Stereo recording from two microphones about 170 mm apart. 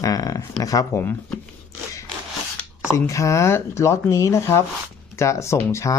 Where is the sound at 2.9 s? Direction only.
15° left (ahead or behind).